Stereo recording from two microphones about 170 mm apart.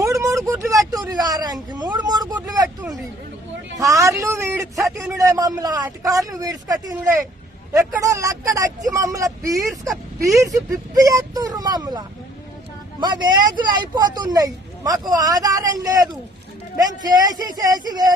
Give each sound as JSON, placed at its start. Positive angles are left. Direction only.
{"t": 0.0, "sound": "a sound", "side_deg": -20}
{"t": 3.8, "sound": "speech", "side_deg": -20}
{"t": 8.0, "sound": "speech", "side_deg": -20}